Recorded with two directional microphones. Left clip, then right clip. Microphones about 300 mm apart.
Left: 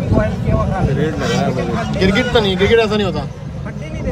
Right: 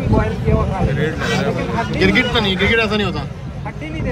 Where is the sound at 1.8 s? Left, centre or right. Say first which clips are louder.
Right 2 dB; centre.